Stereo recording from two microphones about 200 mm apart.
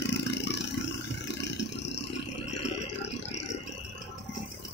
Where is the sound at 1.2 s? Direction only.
60° left (ahead or behind).